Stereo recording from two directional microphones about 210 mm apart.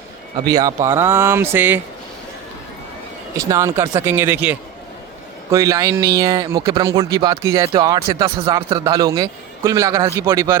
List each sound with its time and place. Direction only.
0.4 s speech: 15° right (ahead or behind)
3.3 s speech: 15° right (ahead or behind)